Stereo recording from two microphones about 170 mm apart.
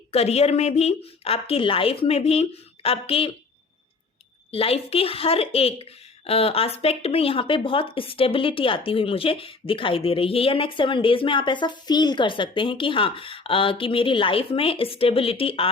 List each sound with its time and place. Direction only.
0.1 s speech: 35° left (ahead or behind)
4.5 s speech: 35° left (ahead or behind)